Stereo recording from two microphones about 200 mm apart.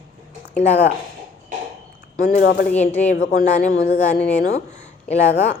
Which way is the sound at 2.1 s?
50° left (ahead or behind).